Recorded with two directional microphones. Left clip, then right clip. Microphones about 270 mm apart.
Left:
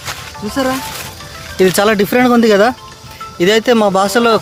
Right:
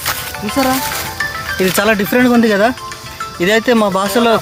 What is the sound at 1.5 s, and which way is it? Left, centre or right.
Speech, left.